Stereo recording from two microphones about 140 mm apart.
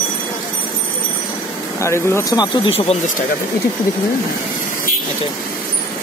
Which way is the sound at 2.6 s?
45° left (ahead or behind).